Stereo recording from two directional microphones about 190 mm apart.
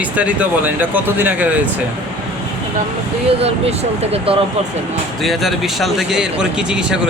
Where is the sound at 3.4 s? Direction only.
30° right (ahead or behind).